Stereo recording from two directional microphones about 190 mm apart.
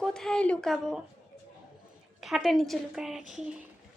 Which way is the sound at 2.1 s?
Centre (ahead or behind).